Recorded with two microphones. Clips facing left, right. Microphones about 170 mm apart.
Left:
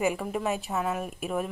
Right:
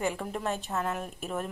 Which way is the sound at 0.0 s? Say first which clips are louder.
Left 4 dB; 5° left (ahead or behind).